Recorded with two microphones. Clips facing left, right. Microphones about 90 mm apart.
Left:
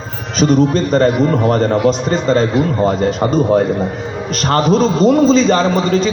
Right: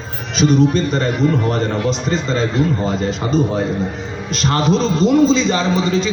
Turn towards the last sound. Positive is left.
turn(degrees=45)  # may be behind; listen again after turning